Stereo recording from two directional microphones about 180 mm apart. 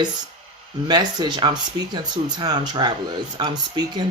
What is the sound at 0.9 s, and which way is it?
Speech, 25° right (ahead or behind).